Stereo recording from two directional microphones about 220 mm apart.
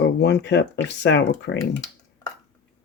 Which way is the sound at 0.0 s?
50° left (ahead or behind).